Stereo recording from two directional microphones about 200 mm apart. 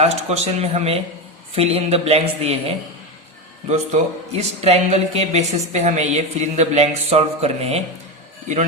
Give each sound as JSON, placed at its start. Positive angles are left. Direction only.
{"t": 0.0, "sound": "a woman's voice", "side_deg": -35}
{"t": 4.3, "sound": "a woman's voice", "side_deg": -35}